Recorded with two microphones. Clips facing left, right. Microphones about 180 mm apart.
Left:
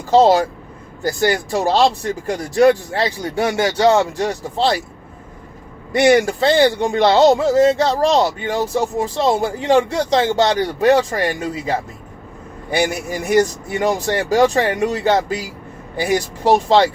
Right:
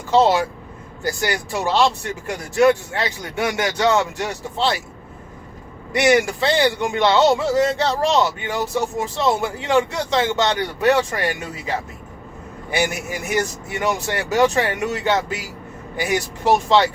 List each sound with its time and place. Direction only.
0.1 s speech: 40° left (ahead or behind)
6.0 s speech: 35° left (ahead or behind)
12.9 s speech: 35° left (ahead or behind)